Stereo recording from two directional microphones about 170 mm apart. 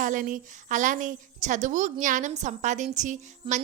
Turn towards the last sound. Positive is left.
turn(degrees=-45)  # may be behind; listen again after turning